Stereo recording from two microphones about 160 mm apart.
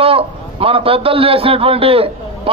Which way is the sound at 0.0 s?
35° right (ahead or behind).